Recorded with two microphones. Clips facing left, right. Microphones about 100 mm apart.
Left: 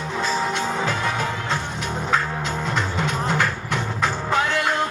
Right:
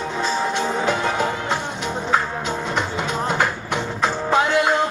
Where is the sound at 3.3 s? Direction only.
20° right (ahead or behind).